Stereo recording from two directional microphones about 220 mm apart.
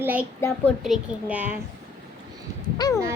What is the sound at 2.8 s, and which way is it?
Speech, 15° left (ahead or behind).